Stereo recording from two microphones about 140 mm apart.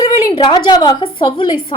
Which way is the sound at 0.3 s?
30° left (ahead or behind).